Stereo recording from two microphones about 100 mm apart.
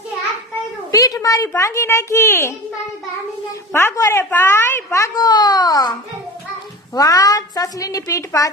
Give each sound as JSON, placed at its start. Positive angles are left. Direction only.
{"t": 0.9, "sound": "a child's voice", "side_deg": 35}
{"t": 3.7, "sound": "a child's voice", "side_deg": 25}
{"t": 6.9, "sound": "a child's voice", "side_deg": 35}